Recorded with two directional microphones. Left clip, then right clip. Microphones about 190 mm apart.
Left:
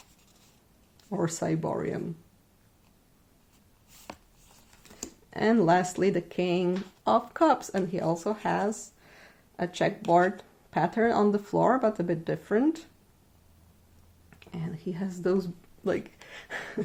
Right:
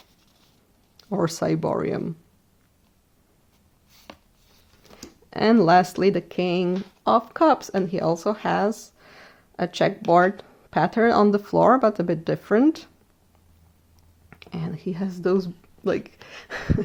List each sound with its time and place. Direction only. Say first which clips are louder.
0.9 s speech: right 6 dB; 40° right (ahead or behind)
5.3 s speech: right 7 dB; 35° right (ahead or behind)
14.3 s speech: right 6 dB; 45° right (ahead or behind)